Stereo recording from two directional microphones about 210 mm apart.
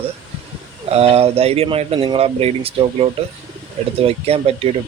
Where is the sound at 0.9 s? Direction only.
30° right (ahead or behind).